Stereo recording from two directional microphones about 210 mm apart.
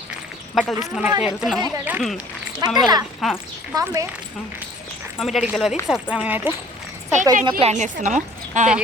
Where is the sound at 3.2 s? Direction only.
Centre (ahead or behind).